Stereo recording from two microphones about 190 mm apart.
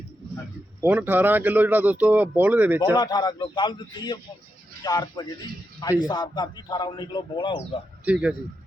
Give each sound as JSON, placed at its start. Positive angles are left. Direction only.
{"t": 0.8, "sound": "speech", "side_deg": -10}
{"t": 2.9, "sound": "a man's voice", "side_deg": 20}
{"t": 8.0, "sound": "a man's voice", "side_deg": -5}